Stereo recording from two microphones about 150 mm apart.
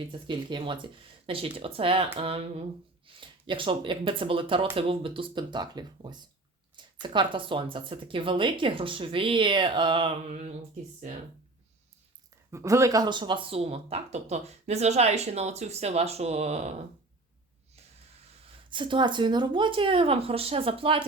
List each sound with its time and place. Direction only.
0.1 s speech: 35° right (ahead or behind)
12.5 s speech: 20° right (ahead or behind); by 16.7 s 45° right (ahead or behind)
18.7 s speech: 30° right (ahead or behind)